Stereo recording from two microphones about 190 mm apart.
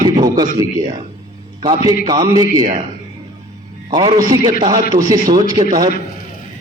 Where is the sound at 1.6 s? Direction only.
20° right (ahead or behind).